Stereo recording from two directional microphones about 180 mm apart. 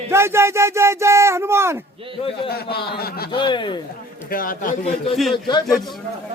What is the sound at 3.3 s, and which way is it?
Speech, 25° left (ahead or behind).